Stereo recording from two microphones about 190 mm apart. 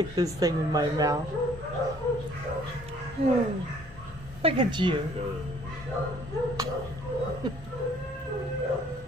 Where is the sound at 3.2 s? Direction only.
30° right (ahead or behind).